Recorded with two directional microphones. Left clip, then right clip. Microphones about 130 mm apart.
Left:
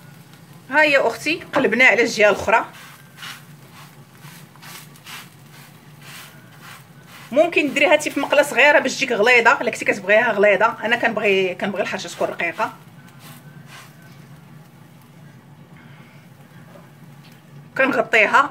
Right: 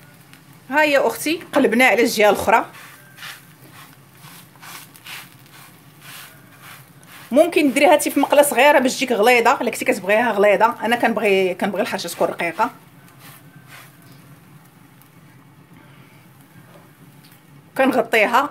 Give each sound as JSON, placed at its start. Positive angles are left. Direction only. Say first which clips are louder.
{"t": 0.7, "sound": "speech", "louder": "left 1 dB", "side_deg": -30}
{"t": 7.2, "sound": "a woman's voice", "louder": "right 2 dB", "side_deg": -50}
{"t": 17.7, "sound": "speech", "louder": "even", "side_deg": -40}